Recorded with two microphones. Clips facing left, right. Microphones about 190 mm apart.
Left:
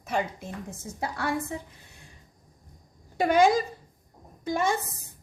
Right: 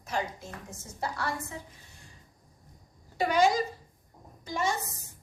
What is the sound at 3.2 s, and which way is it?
A woman's voice, 55° left (ahead or behind).